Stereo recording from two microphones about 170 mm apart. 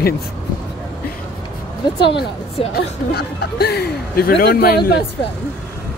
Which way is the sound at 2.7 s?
70° left (ahead or behind).